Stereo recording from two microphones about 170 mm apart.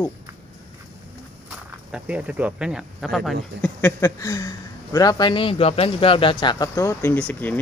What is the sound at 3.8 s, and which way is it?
Speech, 20° left (ahead or behind).